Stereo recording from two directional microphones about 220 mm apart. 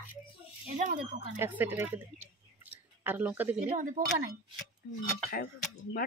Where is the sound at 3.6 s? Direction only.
35° right (ahead or behind).